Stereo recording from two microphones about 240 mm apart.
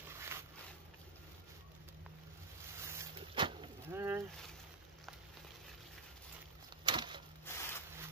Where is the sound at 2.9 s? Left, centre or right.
Centre.